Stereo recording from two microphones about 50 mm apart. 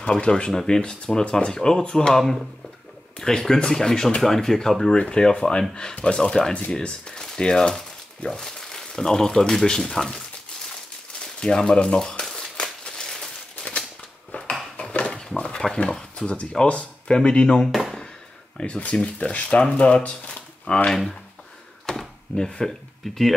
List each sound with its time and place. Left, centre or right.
0.0 s speech: centre
11.3 s a sound: centre
14.3 s a sound: left
14.8 s dishes: left
15.3 s speech: centre
17.6 s a sound: centre
18.6 s speech: left
20.9 s speech: centre
21.8 s door: centre
22.5 s speech: centre
23.0 s speech: centre